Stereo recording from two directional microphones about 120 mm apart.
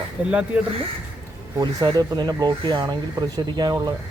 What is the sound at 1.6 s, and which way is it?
Speech, 35° right (ahead or behind).